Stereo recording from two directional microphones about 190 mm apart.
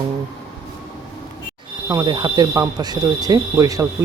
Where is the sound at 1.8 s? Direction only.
20° right (ahead or behind).